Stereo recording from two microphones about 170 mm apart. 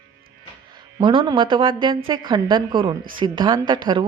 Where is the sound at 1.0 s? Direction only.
25° right (ahead or behind).